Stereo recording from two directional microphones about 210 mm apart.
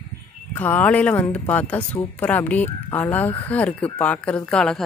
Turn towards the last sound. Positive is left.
turn(degrees=5)  # may be behind; listen again after turning